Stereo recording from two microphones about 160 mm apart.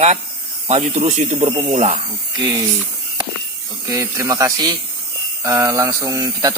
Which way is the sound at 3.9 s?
20° right (ahead or behind).